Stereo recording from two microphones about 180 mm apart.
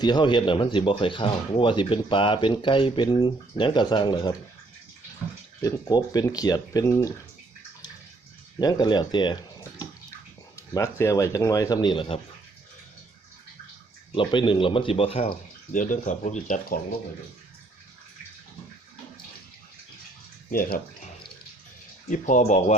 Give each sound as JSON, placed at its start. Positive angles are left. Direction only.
{"t": 0.0, "sound": "speech", "side_deg": 25}
{"t": 5.6, "sound": "speech", "side_deg": 20}
{"t": 8.5, "sound": "speech", "side_deg": 25}
{"t": 14.2, "sound": "speech", "side_deg": 25}
{"t": 15.3, "sound": "speech", "side_deg": 45}
{"t": 20.5, "sound": "speech", "side_deg": 50}
{"t": 22.1, "sound": "speech", "side_deg": 45}